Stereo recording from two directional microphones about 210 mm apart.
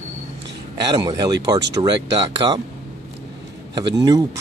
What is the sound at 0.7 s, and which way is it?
Speech, 20° right (ahead or behind).